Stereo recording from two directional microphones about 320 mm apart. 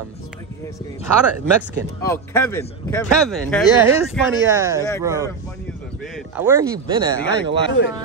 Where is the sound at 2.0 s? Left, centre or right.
Centre.